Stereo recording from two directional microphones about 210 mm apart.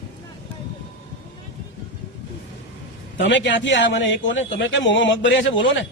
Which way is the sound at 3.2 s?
60° left (ahead or behind).